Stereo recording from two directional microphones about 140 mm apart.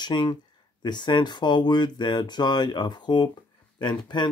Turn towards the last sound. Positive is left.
turn(degrees=30)  # may be behind; listen again after turning